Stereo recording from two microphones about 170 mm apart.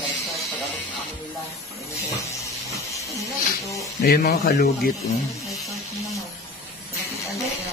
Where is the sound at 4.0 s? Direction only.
60° left (ahead or behind).